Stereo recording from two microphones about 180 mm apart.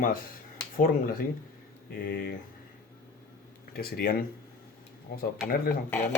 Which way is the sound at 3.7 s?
55° left (ahead or behind).